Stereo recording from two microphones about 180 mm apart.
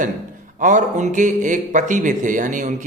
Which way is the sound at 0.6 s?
45° right (ahead or behind).